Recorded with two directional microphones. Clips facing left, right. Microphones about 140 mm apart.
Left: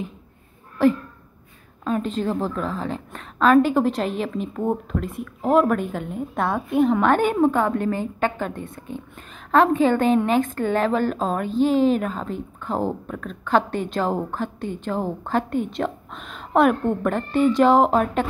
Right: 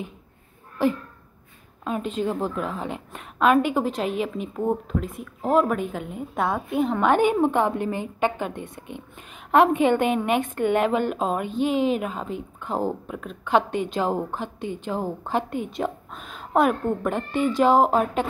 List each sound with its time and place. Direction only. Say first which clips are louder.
1.9 s a woman's voice: left 2 dB; 10° right (ahead or behind)
7.1 s a woman's voice: left 1 dB; 15° right (ahead or behind)